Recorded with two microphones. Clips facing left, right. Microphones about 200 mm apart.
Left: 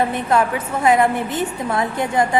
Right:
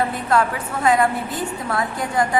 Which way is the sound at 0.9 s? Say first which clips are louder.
Left 2 dB; 25° left (ahead or behind).